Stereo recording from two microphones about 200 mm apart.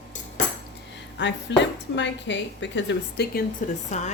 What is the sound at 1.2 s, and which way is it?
A woman's voice, 60° left (ahead or behind).